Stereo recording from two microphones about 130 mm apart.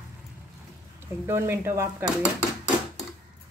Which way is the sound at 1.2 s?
20° right (ahead or behind).